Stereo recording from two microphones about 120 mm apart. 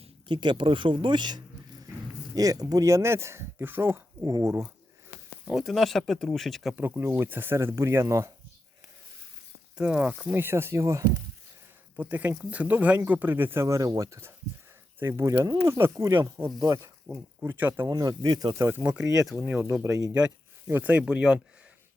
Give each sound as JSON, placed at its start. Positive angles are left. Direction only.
{"t": 0.3, "sound": "speech", "side_deg": -40}
{"t": 4.3, "sound": "speech", "side_deg": -30}
{"t": 5.5, "sound": "speech", "side_deg": 0}
{"t": 6.7, "sound": "speech", "side_deg": -15}
{"t": 9.7, "sound": "speech", "side_deg": -10}
{"t": 17.8, "sound": "speech", "side_deg": -30}
{"t": 18.7, "sound": "speech", "side_deg": -15}
{"t": 19.1, "sound": "speech", "side_deg": -5}
{"t": 20.1, "sound": "speech", "side_deg": -15}